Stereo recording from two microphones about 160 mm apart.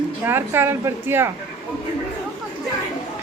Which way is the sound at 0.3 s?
15° right (ahead or behind).